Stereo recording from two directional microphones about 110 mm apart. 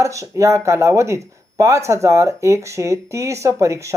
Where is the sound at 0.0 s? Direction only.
30° right (ahead or behind).